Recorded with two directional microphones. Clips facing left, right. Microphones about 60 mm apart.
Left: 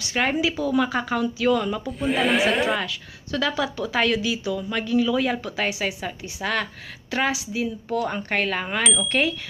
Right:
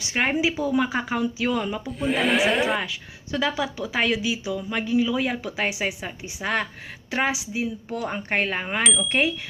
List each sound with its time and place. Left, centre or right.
0.0 s a woman's voice: centre
1.9 s a sound: centre
2.8 s speech: centre